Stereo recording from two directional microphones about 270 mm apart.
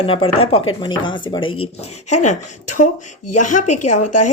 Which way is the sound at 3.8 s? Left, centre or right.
Left.